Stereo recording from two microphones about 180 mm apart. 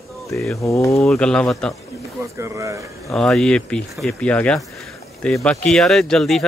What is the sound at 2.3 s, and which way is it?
Speech, 15° right (ahead or behind).